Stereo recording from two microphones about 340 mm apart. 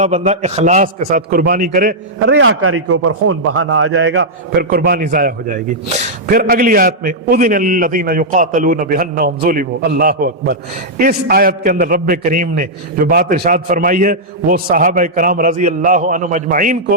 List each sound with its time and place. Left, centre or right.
0.0 s a man's voice: centre